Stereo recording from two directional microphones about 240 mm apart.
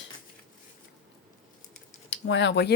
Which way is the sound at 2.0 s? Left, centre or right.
Left.